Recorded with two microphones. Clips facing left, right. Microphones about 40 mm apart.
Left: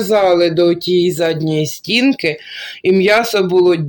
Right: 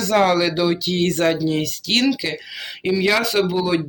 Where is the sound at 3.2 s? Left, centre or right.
Left.